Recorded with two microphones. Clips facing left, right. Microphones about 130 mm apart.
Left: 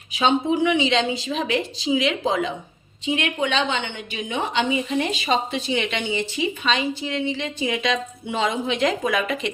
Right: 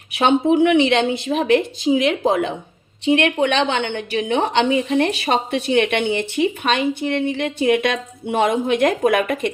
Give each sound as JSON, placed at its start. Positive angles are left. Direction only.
{"t": 0.1, "sound": "a woman's voice", "side_deg": -60}
{"t": 3.0, "sound": "a woman's voice", "side_deg": -70}